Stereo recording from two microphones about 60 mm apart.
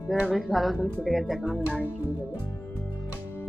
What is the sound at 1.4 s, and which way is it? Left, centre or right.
Music, right.